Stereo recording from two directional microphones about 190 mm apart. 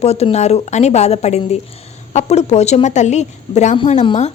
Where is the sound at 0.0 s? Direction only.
35° left (ahead or behind).